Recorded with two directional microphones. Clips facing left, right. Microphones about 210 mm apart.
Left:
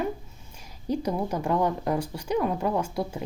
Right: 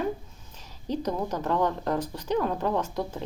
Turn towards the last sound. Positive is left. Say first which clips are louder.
# left 1 dB
turn(degrees=10)  # may be behind; listen again after turning